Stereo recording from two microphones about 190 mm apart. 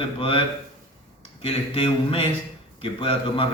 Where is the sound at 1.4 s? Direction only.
30° left (ahead or behind).